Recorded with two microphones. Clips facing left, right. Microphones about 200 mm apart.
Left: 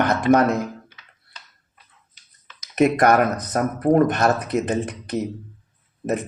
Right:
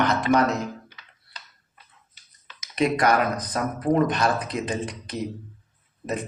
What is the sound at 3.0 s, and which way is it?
Speech, 55° left (ahead or behind).